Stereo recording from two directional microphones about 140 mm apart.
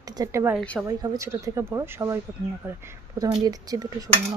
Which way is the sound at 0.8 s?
25° right (ahead or behind).